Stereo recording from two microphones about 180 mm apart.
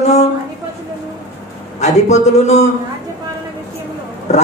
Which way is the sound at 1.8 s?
40° left (ahead or behind).